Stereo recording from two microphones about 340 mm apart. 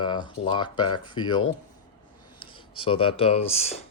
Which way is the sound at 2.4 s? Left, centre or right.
Centre.